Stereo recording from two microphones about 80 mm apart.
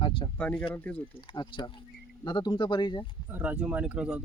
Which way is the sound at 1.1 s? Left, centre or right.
Left.